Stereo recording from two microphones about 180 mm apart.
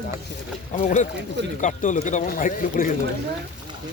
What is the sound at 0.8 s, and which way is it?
Speech, 45° left (ahead or behind).